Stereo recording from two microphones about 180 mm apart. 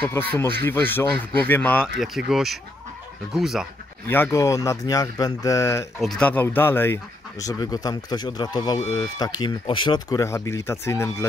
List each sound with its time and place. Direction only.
0.0 s speech: 10° left (ahead or behind)
4.1 s speech: 15° left (ahead or behind)
5.9 s speech: 5° left (ahead or behind)